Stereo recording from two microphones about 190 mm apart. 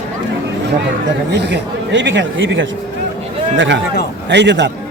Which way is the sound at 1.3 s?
65° right (ahead or behind).